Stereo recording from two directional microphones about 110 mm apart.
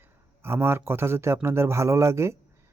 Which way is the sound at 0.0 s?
20° right (ahead or behind).